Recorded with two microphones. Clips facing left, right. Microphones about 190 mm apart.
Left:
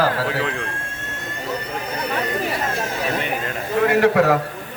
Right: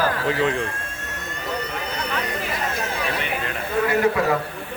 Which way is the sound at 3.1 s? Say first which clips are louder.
Left 3 dB; 45° left (ahead or behind).